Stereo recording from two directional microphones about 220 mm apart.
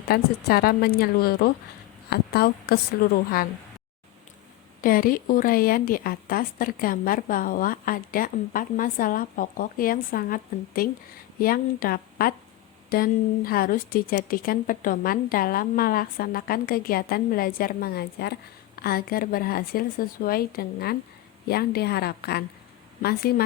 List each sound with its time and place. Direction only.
0.1 s a woman's voice: 45° left (ahead or behind)
4.8 s a woman's voice: 40° left (ahead or behind)